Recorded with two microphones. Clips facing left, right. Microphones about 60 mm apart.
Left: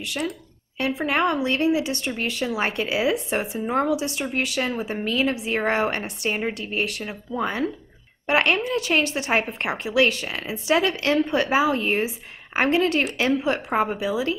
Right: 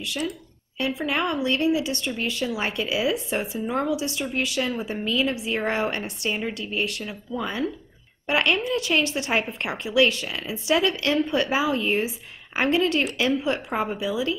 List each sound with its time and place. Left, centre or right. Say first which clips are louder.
0.7 s speech: left 3 dB; left
4.7 s a woman's voice: left 2 dB; centre
5.0 s a woman's voice: left 1 dB; left